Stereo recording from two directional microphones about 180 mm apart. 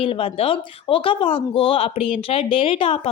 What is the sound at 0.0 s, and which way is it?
A woman's voice, 30° left (ahead or behind).